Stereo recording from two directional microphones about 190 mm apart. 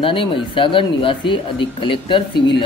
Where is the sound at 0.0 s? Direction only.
25° left (ahead or behind).